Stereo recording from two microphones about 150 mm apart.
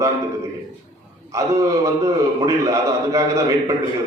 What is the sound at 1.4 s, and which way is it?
A man's voice, 20° right (ahead or behind).